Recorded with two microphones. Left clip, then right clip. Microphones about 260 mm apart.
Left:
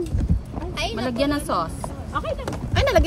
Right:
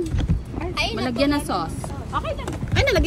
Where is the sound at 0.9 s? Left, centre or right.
Centre.